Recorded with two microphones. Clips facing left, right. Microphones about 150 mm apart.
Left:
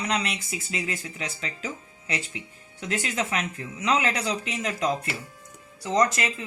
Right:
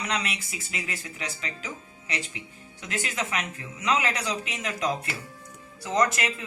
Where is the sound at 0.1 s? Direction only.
30° left (ahead or behind).